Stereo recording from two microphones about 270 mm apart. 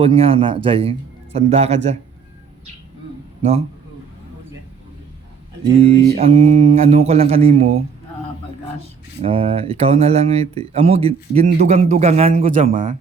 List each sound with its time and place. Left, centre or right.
0.0 s speech: right
5.7 s speech: right
9.2 s speech: right